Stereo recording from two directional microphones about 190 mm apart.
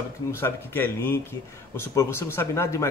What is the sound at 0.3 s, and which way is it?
Speech, 10° left (ahead or behind).